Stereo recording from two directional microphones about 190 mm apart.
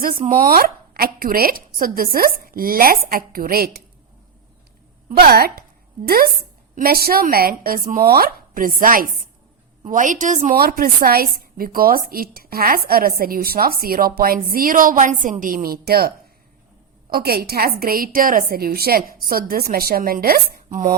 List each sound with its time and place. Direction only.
0.0 s a woman's voice: 45° right (ahead or behind)
5.0 s a woman's voice: 50° right (ahead or behind)